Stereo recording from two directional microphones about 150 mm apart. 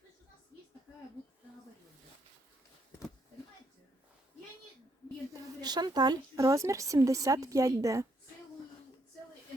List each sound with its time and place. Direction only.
5.3 s a woman's voice: 25° right (ahead or behind)